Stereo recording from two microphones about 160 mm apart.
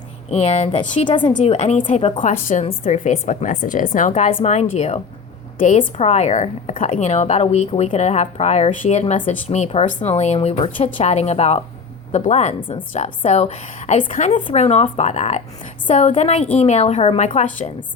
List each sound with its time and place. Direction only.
0.3 s a woman's voice: 40° left (ahead or behind)
1.0 s a woman's voice: 30° left (ahead or behind)
1.5 s a woman's voice: 45° left (ahead or behind)
2.2 s a woman's voice: 55° left (ahead or behind)
2.6 s a woman's voice: 40° left (ahead or behind)
5.5 s a woman's voice: 55° left (ahead or behind)
12.5 s a woman's voice: 30° left (ahead or behind)
12.9 s a woman's voice: 50° left (ahead or behind)